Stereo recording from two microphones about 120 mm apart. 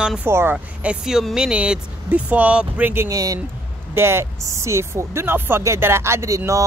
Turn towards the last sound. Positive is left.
turn(degrees=-25)  # may be behind; listen again after turning